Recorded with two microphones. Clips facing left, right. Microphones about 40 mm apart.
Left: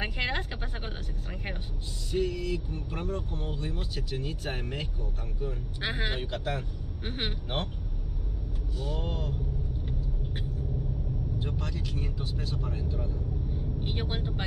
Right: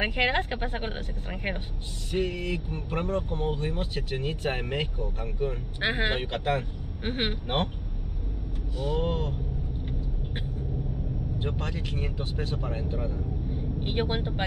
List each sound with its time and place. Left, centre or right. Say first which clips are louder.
0.0 s speech: right 6 dB; right
8.7 s speech: right 7 dB; right
11.3 s speech: right 5 dB; right